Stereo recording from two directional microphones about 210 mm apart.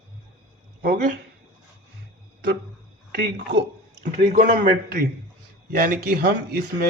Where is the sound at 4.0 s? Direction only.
40° right (ahead or behind).